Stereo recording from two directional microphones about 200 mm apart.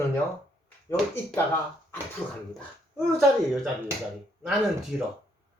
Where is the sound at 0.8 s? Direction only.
10° left (ahead or behind).